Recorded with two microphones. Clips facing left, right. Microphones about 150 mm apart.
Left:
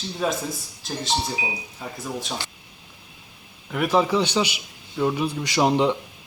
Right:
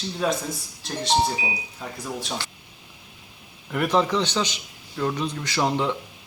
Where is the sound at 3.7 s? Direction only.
5° left (ahead or behind).